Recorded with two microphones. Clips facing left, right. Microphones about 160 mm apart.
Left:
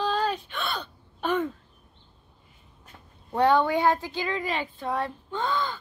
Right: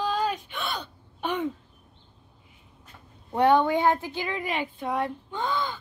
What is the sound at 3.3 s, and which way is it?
Speech, 20° right (ahead or behind).